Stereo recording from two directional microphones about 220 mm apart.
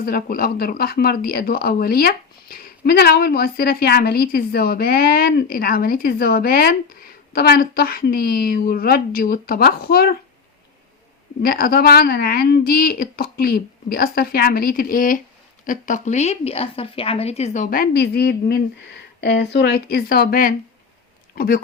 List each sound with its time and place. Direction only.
0.0 s speech: 40° left (ahead or behind)
11.4 s a woman's voice: 45° left (ahead or behind)